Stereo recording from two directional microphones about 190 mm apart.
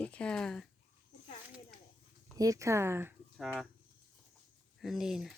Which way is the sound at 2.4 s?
15° right (ahead or behind).